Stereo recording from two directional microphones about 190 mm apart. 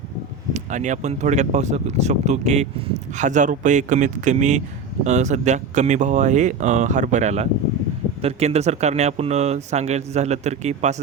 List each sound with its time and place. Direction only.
0.5 s speech: 40° right (ahead or behind)